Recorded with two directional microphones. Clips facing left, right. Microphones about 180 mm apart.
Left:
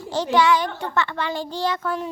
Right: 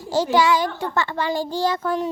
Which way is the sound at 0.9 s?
35° right (ahead or behind).